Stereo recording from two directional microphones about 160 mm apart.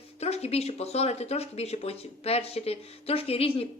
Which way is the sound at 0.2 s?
40° left (ahead or behind).